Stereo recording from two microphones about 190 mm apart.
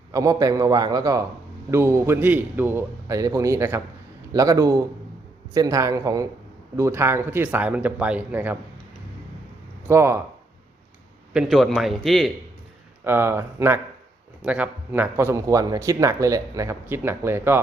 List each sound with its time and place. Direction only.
0.1 s a man's voice: 20° right (ahead or behind)
9.9 s speech: 15° right (ahead or behind)
11.3 s a man's voice: centre (ahead or behind)
13.1 s speech: 15° right (ahead or behind)